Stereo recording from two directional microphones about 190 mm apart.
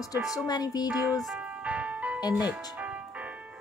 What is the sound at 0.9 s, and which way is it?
Ice cream truck, 5° right (ahead or behind).